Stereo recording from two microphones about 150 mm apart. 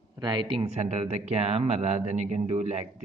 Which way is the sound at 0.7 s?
45° right (ahead or behind).